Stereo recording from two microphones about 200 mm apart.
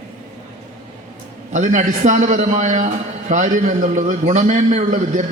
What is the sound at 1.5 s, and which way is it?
A man's voice, 40° right (ahead or behind).